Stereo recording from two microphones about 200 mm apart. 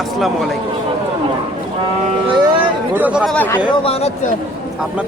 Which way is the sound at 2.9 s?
5° right (ahead or behind).